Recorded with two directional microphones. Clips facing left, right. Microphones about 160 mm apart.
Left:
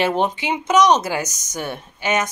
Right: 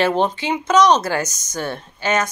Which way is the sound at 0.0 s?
15° left (ahead or behind).